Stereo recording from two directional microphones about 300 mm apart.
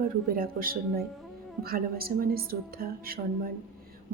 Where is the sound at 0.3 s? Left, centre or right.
Right.